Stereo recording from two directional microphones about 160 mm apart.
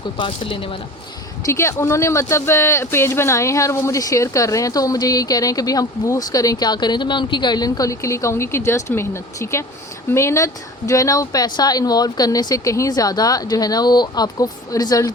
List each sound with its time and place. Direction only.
0.2 s speech: 35° left (ahead or behind)
1.5 s speech: 15° left (ahead or behind)